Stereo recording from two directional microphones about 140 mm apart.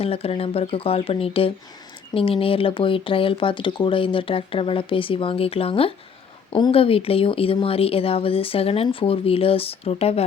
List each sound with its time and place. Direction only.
0.0 s speech: 45° left (ahead or behind)